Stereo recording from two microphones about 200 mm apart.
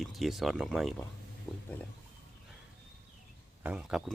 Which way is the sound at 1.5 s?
20° left (ahead or behind).